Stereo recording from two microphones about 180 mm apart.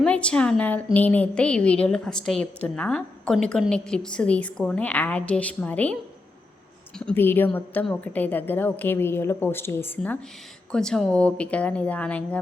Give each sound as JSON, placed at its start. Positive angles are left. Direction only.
{"t": 0.0, "sound": "a woman's voice", "side_deg": 5}
{"t": 7.0, "sound": "a woman's voice", "side_deg": 10}